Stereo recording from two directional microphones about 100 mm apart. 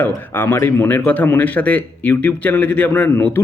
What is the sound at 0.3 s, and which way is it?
Speech, 20° left (ahead or behind).